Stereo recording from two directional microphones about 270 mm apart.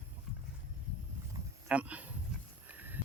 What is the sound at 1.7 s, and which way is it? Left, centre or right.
Speech, centre.